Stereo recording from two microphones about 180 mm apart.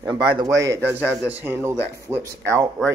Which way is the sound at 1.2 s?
10° right (ahead or behind).